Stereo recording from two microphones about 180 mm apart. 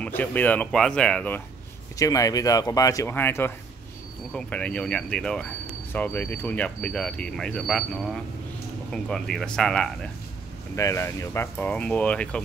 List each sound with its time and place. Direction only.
0.0 s speech: 10° left (ahead or behind)
2.0 s speech: 20° left (ahead or behind); by 9.8 s 5° left (ahead or behind)
10.8 s speech: 15° left (ahead or behind)